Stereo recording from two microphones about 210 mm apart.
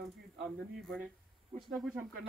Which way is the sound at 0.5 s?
Centre (ahead or behind).